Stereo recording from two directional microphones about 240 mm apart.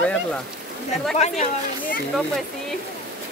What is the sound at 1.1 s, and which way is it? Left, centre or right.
Speech, left.